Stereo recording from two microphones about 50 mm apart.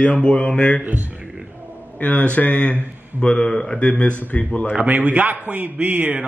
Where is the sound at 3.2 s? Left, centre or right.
Centre.